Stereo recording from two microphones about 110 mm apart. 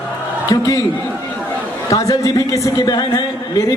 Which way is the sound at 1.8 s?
30° left (ahead or behind).